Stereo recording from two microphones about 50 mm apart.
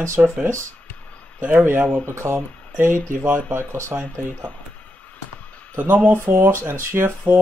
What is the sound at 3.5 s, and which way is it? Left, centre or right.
Speech, right.